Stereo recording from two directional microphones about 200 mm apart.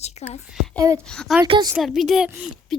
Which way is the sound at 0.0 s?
35° left (ahead or behind).